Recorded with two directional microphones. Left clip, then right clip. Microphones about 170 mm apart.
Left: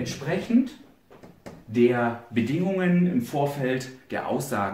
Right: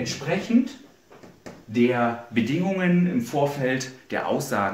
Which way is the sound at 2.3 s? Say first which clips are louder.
Right 1 dB; 15° right (ahead or behind).